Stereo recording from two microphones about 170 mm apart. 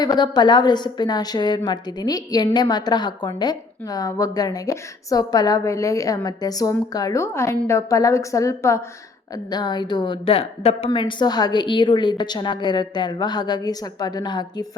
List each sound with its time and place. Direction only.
0.0 s a woman's voice: 25° left (ahead or behind)